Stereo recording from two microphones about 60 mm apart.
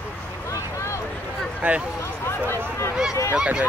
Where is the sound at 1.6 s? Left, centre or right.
Right.